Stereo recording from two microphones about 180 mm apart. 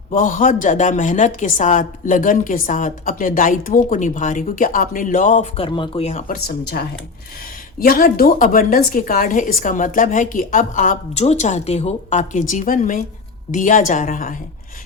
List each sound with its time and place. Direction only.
0.1 s a woman's voice: 45° left (ahead or behind)